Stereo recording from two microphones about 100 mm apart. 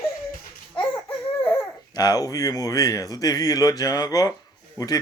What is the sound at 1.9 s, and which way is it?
Speech, 40° left (ahead or behind).